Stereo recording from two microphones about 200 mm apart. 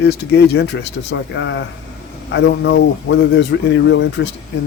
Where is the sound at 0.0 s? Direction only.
55° left (ahead or behind).